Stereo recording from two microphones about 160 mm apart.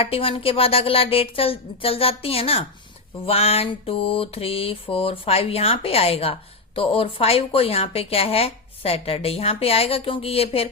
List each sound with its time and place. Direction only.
0.0 s a woman's voice: 35° left (ahead or behind)